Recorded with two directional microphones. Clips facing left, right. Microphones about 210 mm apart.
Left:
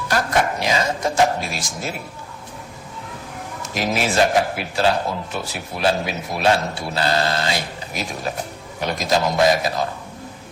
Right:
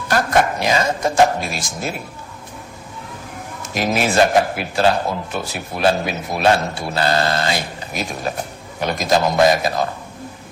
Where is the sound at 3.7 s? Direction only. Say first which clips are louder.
Right 3 dB; 50° right (ahead or behind).